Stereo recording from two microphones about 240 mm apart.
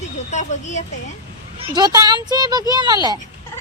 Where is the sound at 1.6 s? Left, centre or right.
Centre.